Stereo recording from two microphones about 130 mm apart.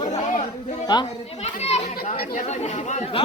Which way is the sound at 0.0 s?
65° left (ahead or behind).